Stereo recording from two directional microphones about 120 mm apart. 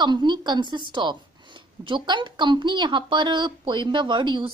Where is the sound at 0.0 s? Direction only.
40° right (ahead or behind).